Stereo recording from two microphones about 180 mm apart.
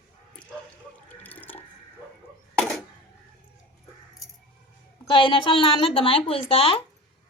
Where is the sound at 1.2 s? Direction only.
10° left (ahead or behind).